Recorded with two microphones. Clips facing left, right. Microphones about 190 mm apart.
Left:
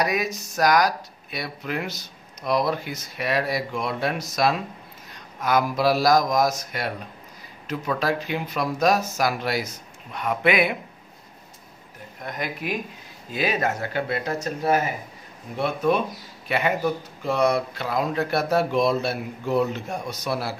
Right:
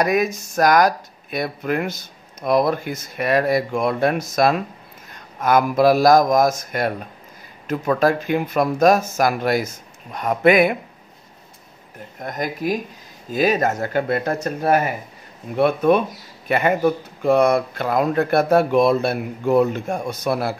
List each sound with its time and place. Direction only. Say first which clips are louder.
0.0 s speech: right 6 dB; 50° right (ahead or behind)
12.2 s speech: right 5 dB; 45° right (ahead or behind)